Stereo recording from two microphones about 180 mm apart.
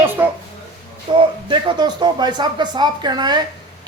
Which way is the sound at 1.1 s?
25° right (ahead or behind).